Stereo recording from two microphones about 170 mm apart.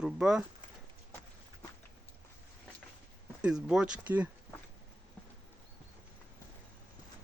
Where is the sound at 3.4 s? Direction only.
5° right (ahead or behind).